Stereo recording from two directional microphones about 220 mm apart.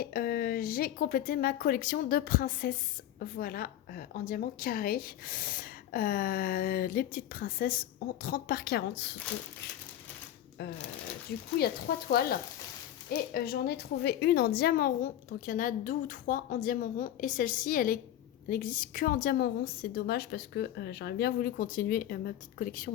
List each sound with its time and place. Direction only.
0.0 s a woman's voice: 45° left (ahead or behind)
11.9 s a woman's voice: 45° left (ahead or behind)
13.1 s a woman's voice: 45° left (ahead or behind)